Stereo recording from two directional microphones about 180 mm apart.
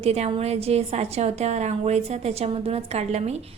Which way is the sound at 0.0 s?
35° right (ahead or behind).